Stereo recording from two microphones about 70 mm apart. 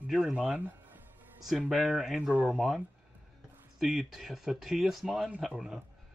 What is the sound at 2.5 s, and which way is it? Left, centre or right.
Speech, centre.